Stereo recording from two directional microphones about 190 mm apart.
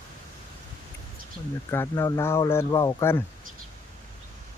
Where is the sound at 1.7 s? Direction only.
15° left (ahead or behind).